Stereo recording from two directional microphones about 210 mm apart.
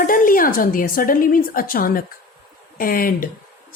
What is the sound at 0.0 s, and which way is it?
A woman's voice, 40° left (ahead or behind).